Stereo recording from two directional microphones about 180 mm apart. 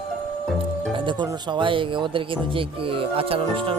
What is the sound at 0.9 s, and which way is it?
Speech, 25° right (ahead or behind).